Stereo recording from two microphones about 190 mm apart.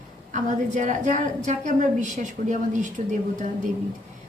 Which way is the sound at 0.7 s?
40° right (ahead or behind).